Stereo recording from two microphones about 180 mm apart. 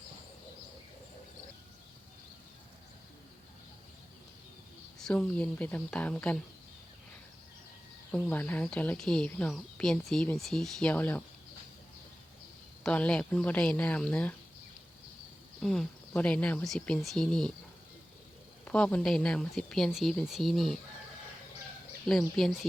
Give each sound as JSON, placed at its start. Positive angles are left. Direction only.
{"t": 4.9, "sound": "a woman's voice", "side_deg": 5}
{"t": 8.1, "sound": "a woman's voice", "side_deg": 10}
{"t": 12.8, "sound": "speech", "side_deg": 5}
{"t": 15.6, "sound": "a woman's voice", "side_deg": 5}
{"t": 18.6, "sound": "a woman's voice", "side_deg": 5}
{"t": 22.0, "sound": "a woman's voice", "side_deg": 0}